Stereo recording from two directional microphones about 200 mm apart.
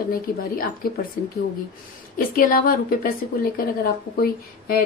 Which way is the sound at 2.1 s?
45° left (ahead or behind).